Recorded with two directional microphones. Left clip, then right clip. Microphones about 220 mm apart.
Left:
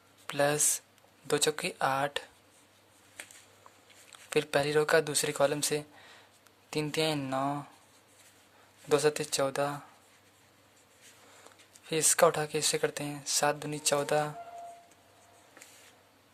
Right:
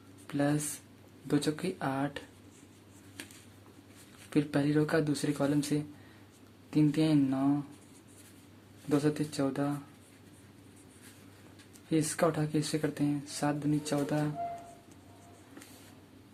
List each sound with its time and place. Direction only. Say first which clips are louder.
0.3 s speech: left 4 dB; 40° left (ahead or behind)
4.3 s speech: left 2 dB; 40° left (ahead or behind)
8.9 s speech: left 4 dB; 40° left (ahead or behind)
11.9 s speech: left 4 dB; 40° left (ahead or behind)